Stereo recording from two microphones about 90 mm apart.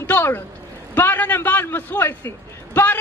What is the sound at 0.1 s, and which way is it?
A man's voice, 25° left (ahead or behind).